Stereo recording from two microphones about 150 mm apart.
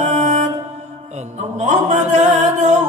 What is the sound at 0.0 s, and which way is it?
Music, 50° right (ahead or behind).